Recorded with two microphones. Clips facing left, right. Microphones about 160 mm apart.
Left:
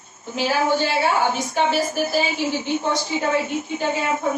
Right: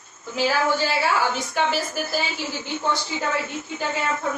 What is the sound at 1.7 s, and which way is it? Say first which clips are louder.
A woman's voice: left 5 dB; 20° left (ahead or behind).